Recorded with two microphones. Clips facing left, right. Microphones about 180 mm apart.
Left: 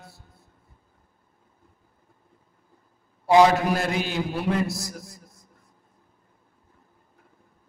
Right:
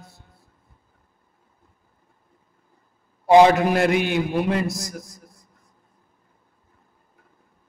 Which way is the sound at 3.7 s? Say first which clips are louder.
Right 6 dB; 65° right (ahead or behind).